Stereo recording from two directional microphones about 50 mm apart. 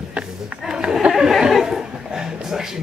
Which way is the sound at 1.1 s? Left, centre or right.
Centre.